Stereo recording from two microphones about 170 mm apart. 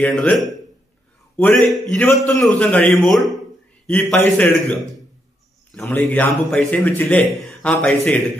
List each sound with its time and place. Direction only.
0.0 s a man's voice: 5° left (ahead or behind)
5.8 s a man's voice: 10° left (ahead or behind)